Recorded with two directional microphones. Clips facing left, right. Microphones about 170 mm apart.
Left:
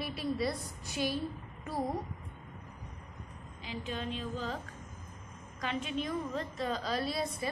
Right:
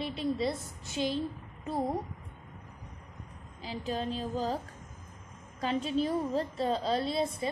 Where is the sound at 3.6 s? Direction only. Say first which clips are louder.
Right 4 dB; 35° right (ahead or behind).